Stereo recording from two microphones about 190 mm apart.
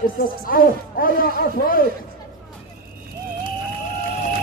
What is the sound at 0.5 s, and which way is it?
Speech, 50° left (ahead or behind).